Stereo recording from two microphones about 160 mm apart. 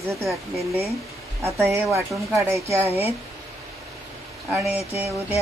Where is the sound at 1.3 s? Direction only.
15° right (ahead or behind).